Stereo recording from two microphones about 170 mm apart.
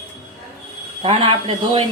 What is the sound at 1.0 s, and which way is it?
Speech, 30° right (ahead or behind).